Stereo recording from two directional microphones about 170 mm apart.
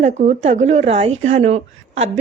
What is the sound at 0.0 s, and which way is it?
A woman's voice, 45° right (ahead or behind).